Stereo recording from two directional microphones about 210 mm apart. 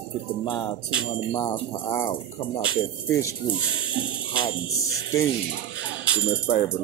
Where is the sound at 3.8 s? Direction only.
5° right (ahead or behind).